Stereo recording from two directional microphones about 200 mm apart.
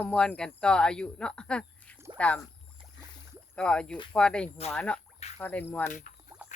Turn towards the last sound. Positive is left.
turn(degrees=10)  # may be behind; listen again after turning